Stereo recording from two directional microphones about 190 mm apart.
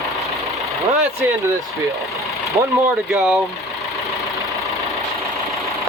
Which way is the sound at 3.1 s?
Centre (ahead or behind).